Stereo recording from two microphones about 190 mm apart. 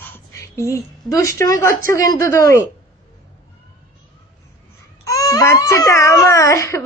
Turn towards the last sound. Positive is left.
turn(degrees=15)  # may be behind; listen again after turning